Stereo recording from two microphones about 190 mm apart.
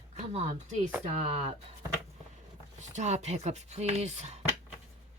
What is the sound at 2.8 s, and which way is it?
Speech, 40° right (ahead or behind).